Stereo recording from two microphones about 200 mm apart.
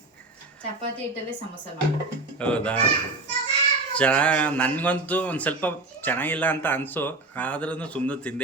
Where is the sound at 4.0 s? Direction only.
5° left (ahead or behind).